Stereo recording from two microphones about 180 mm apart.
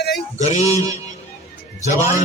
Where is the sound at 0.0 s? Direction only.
65° left (ahead or behind).